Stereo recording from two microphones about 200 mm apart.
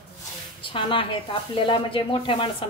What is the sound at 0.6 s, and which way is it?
A woman's voice, 25° left (ahead or behind).